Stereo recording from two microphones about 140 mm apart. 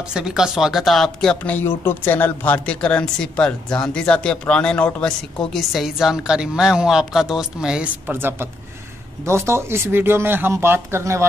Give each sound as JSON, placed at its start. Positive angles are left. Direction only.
{"t": 0.1, "sound": "a man's voice", "side_deg": -5}